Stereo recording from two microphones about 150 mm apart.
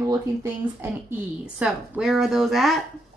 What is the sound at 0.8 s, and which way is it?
A woman's voice, 10° right (ahead or behind).